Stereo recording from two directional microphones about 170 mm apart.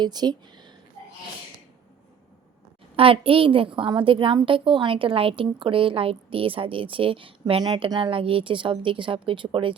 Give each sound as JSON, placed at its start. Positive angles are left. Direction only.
{"t": 0.0, "sound": "speech", "side_deg": -25}
{"t": 2.9, "sound": "a woman's voice", "side_deg": -30}